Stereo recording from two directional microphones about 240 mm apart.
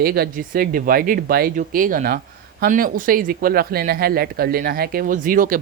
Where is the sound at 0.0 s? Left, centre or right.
Right.